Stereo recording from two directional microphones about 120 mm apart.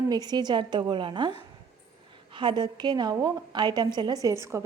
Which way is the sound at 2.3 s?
40° right (ahead or behind).